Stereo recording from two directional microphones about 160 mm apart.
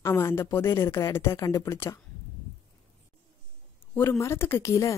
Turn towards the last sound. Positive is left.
turn(degrees=20)  # may be behind; listen again after turning